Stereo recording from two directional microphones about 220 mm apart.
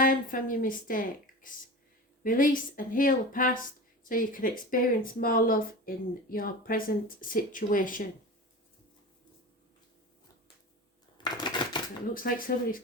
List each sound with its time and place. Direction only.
0.0 s speech: 40° left (ahead or behind)
11.2 s typewriter: 20° left (ahead or behind)
12.1 s speech: 40° left (ahead or behind)